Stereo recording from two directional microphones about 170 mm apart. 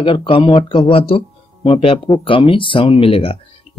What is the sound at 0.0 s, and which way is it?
Speech, 30° left (ahead or behind).